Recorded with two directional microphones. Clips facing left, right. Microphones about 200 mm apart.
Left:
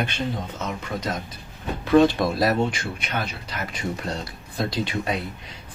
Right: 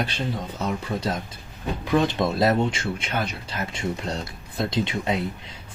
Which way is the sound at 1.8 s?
20° right (ahead or behind).